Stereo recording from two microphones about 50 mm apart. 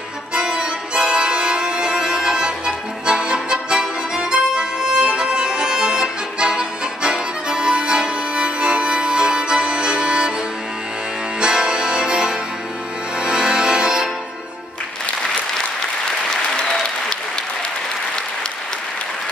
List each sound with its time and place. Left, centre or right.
0.3 s music: centre
11.3 s music: centre
16.5 s applause: centre